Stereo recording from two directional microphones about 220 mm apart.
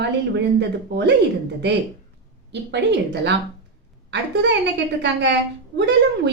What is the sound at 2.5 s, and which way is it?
Speech, 50° right (ahead or behind).